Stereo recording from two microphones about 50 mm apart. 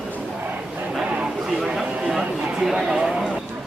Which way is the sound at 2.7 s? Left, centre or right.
Centre.